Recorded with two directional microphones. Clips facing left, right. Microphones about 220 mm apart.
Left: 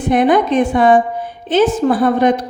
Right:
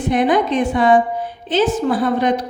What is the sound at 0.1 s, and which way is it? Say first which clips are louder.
Speech: left 4 dB; 55° left (ahead or behind).